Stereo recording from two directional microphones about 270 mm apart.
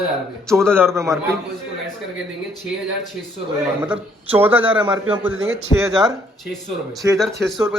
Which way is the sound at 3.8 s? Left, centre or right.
Centre.